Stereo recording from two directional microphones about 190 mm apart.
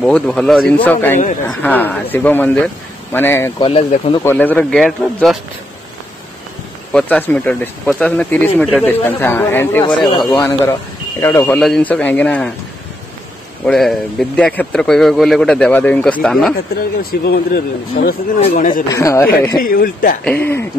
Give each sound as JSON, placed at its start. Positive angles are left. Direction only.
{"t": 0.0, "sound": "speech", "side_deg": 5}
{"t": 3.6, "sound": "speech", "side_deg": 30}
{"t": 4.2, "sound": "speech", "side_deg": 10}
{"t": 6.9, "sound": "speech", "side_deg": 5}
{"t": 13.7, "sound": "speech", "side_deg": 5}
{"t": 16.5, "sound": "a man's voice", "side_deg": 55}
{"t": 18.4, "sound": "a man's voice", "side_deg": 45}
{"t": 18.9, "sound": "speech", "side_deg": 15}
{"t": 19.6, "sound": "a man's voice", "side_deg": 50}
{"t": 20.2, "sound": "speech", "side_deg": 10}